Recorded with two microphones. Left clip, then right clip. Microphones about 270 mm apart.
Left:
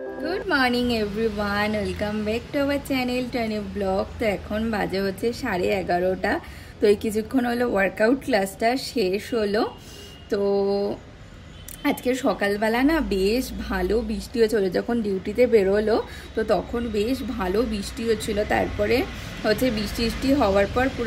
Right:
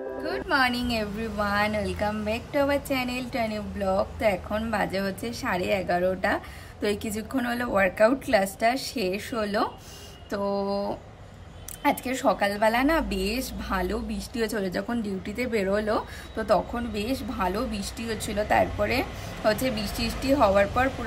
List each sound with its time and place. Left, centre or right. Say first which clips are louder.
0.2 s a woman's voice: left 2 dB; centre
10.4 s mantra: left 5 dB; right
11.8 s a woman's voice: left 1 dB; centre